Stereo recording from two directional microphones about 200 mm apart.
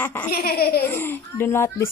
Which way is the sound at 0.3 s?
50° left (ahead or behind).